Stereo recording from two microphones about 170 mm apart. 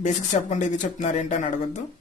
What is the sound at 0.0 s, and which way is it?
Speech, 45° left (ahead or behind).